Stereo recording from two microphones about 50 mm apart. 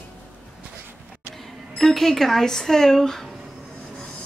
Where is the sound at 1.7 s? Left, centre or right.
Centre.